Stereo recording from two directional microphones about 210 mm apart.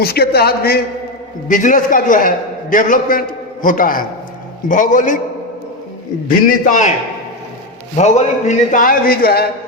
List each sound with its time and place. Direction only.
0.0 s a man's voice: 50° left (ahead or behind)
6.3 s a man's voice: 40° left (ahead or behind)
7.9 s a man's voice: 35° left (ahead or behind)